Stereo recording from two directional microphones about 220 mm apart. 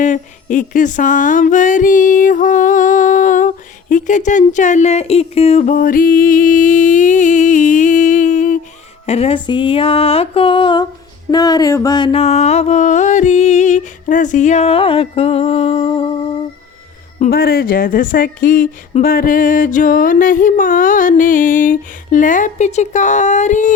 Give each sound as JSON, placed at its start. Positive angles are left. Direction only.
{"t": 0.0, "sound": "a sound", "side_deg": 35}
{"t": 9.0, "sound": "music", "side_deg": 30}
{"t": 17.2, "sound": "speech", "side_deg": 45}